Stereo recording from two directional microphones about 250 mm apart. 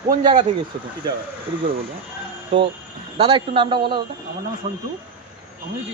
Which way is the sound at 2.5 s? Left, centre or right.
Centre.